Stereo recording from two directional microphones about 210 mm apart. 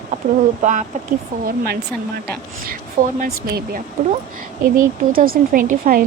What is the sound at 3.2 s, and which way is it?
A woman's voice, 45° right (ahead or behind).